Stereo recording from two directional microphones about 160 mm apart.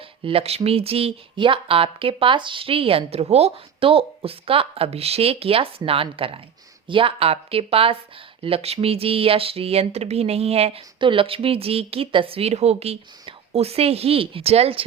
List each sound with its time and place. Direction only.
0.2 s speech: 35° right (ahead or behind)